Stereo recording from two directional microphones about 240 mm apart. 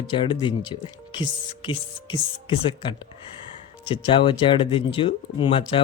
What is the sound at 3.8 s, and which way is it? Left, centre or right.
A man's voice, left.